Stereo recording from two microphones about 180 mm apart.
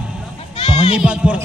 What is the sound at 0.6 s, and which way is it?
Speech, 35° left (ahead or behind).